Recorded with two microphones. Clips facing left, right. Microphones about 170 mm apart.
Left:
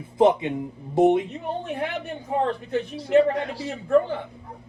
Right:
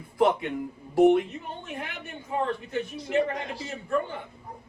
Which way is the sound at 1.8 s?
60° left (ahead or behind).